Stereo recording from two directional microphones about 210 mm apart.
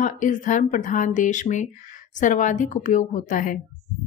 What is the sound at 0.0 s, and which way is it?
A woman's voice, 35° left (ahead or behind).